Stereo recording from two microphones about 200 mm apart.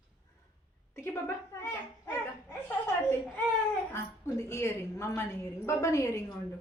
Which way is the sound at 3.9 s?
15° left (ahead or behind).